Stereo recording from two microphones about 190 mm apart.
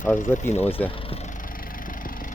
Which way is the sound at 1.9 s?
45° left (ahead or behind).